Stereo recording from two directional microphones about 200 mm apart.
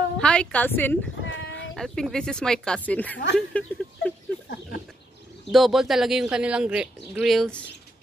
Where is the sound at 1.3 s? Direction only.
70° left (ahead or behind).